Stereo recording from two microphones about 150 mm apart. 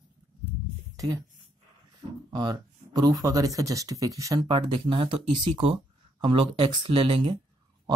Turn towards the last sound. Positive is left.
turn(degrees=-35)  # may be behind; listen again after turning